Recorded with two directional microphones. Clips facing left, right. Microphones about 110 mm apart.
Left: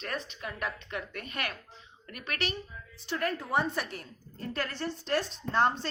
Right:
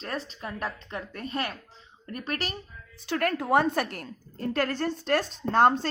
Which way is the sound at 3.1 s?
75° right (ahead or behind).